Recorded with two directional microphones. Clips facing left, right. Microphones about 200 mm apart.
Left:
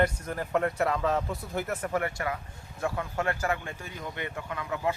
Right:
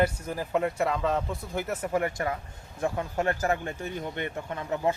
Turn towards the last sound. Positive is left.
turn(degrees=-35)  # may be behind; listen again after turning